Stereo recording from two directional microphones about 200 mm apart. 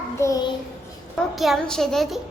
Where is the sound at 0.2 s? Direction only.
20° left (ahead or behind).